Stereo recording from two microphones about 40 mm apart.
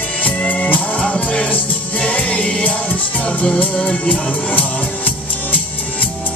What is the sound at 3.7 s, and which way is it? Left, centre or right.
Music, left.